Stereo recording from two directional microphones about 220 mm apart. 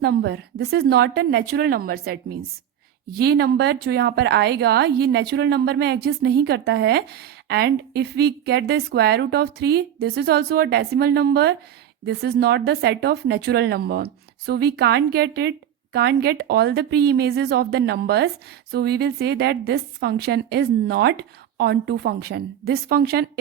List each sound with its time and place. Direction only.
0.0 s a woman's voice: 45° right (ahead or behind)